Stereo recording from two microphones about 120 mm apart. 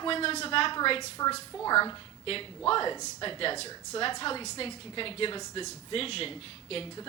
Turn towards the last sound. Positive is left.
turn(degrees=50)  # may be behind; listen again after turning